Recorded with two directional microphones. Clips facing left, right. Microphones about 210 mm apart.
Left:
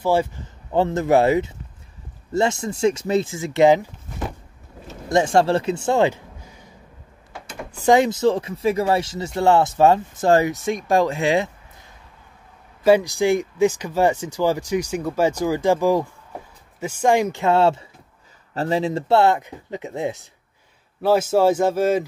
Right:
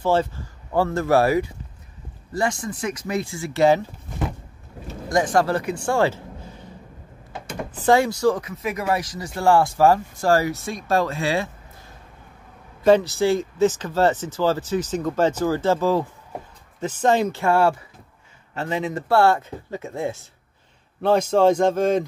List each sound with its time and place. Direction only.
0.0 s speech: 10° left (ahead or behind)
5.1 s speech: 25° left (ahead or behind)
7.8 s speech: 20° left (ahead or behind)
12.8 s speech: 10° left (ahead or behind)
18.5 s speech: 35° left (ahead or behind); by 20.2 s 15° left (ahead or behind)
21.0 s speech: 5° left (ahead or behind)